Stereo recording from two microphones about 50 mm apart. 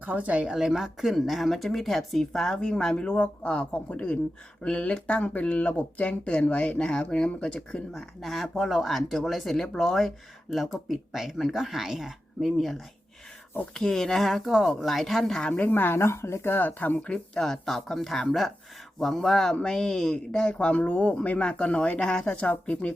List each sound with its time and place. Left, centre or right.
0.0 s speech: right
0.4 s speech: centre
7.9 s speech: centre
13.7 s speech: centre
15.4 s speech: left
15.6 s speech: left
16.0 s speech: left
17.3 s speech: centre; by 22.0 s left
22.0 s speech: centre
22.4 s speech: left